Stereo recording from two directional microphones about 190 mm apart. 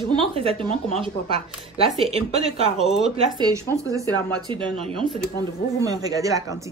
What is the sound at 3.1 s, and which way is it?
A woman's voice, 20° right (ahead or behind).